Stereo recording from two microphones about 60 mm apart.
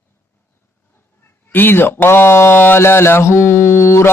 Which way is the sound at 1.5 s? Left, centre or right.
Left.